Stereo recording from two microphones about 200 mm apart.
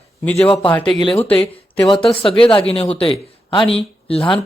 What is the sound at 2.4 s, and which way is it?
Speech, 25° left (ahead or behind).